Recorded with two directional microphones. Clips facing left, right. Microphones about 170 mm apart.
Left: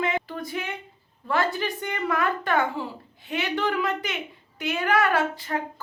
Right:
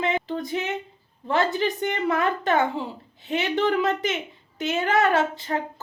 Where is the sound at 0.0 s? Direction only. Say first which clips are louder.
Right 2 dB; 20° right (ahead or behind).